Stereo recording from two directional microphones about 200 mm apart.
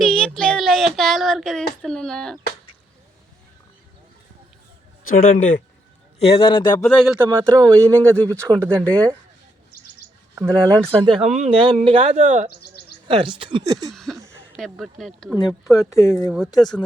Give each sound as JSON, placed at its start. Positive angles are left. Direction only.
{"t": 0.0, "sound": "child singing", "side_deg": 5}
{"t": 1.8, "sound": "a sound", "side_deg": 5}
{"t": 5.0, "sound": "speech", "side_deg": 45}
{"t": 6.1, "sound": "a man's voice", "side_deg": 30}
{"t": 6.8, "sound": "speech", "side_deg": 0}
{"t": 7.3, "sound": "speech", "side_deg": -20}
{"t": 8.8, "sound": "speech", "side_deg": 5}
{"t": 10.3, "sound": "speech", "side_deg": -10}
{"t": 11.3, "sound": "speech", "side_deg": -30}
{"t": 13.1, "sound": "speech", "side_deg": -25}
{"t": 13.9, "sound": "speech", "side_deg": 0}
{"t": 15.9, "sound": "speech", "side_deg": 15}
{"t": 16.2, "sound": "speech", "side_deg": 0}